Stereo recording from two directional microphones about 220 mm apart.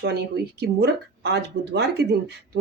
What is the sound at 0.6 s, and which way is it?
Speech, 50° right (ahead or behind).